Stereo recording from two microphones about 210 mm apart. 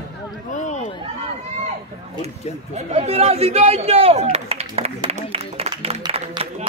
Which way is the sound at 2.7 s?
30° right (ahead or behind).